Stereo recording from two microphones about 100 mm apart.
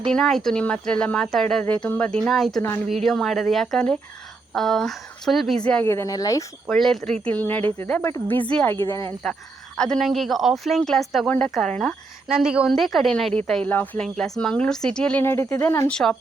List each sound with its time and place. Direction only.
0.1 s speech: 5° left (ahead or behind)
1.6 s speech: 15° left (ahead or behind)
2.6 s speech: 25° left (ahead or behind)
2.8 s speech: centre (ahead or behind)
5.9 s speech: 35° left (ahead or behind)
6.7 s speech: 5° left (ahead or behind); by 9.1 s 30° left (ahead or behind)
9.7 s speech: 10° left (ahead or behind)
11.3 s speech: 15° left (ahead or behind)
12.3 s a woman's voice: 10° right (ahead or behind); by 15.2 s 5° left (ahead or behind)
15.2 s speech: 25° left (ahead or behind)
15.9 s speech: 5° left (ahead or behind)